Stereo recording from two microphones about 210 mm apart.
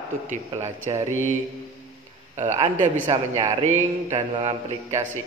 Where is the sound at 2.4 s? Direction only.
35° right (ahead or behind).